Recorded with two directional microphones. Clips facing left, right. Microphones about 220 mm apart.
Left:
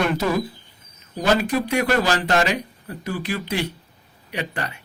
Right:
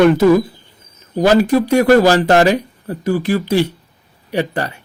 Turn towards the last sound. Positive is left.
turn(degrees=-40)  # may be behind; listen again after turning